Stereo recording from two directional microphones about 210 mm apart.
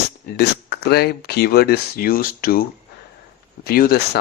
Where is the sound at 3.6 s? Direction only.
45° left (ahead or behind).